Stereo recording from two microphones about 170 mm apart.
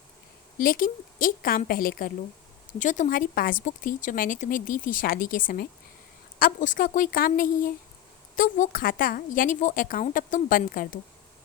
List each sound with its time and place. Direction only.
0.6 s a woman's voice: 55° left (ahead or behind)